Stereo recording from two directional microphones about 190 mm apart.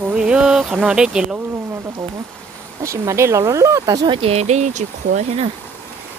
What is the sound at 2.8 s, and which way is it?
Speech, 15° right (ahead or behind).